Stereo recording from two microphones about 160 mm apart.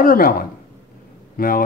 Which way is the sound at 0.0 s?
65° left (ahead or behind).